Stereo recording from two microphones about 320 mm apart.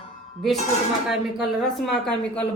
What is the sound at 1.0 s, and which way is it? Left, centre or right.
A woman's voice, centre.